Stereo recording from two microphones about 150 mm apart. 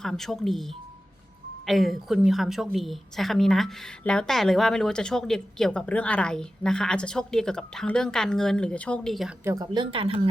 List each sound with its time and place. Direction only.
0.0 s a woman's voice: centre (ahead or behind)
9.4 s speech: 20° right (ahead or behind)
9.7 s speech: 35° right (ahead or behind)